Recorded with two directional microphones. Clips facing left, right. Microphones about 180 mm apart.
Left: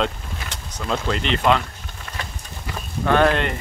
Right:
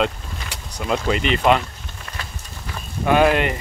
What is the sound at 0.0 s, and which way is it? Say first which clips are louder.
Speech: right 2 dB; 10° right (ahead or behind).